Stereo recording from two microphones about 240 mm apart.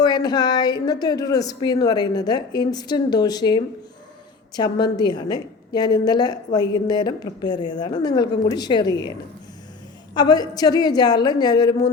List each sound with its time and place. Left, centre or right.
0.0 s a woman's voice: centre
10.2 s a woman's voice: centre